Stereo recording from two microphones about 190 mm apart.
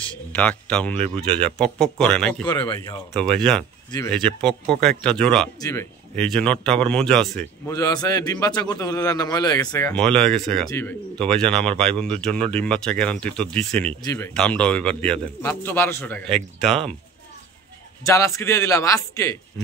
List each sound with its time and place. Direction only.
0.3 s a man's voice: 5° left (ahead or behind)
2.4 s speech: 25° left (ahead or behind)
3.2 s speech: 5° left (ahead or behind)
5.6 s a man's voice: 15° left (ahead or behind)
6.1 s speech: 5° left (ahead or behind)
7.7 s a man's voice: 20° left (ahead or behind)
16.3 s speech: centre (ahead or behind)
18.0 s a man's voice: 15° left (ahead or behind)